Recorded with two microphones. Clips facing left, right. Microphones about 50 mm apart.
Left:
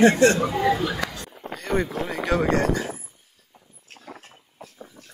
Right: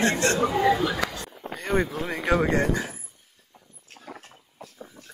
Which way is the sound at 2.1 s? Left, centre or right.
Centre.